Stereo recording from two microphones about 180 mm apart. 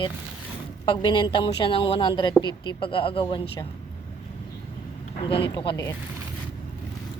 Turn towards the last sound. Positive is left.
turn(degrees=20)  # may be behind; listen again after turning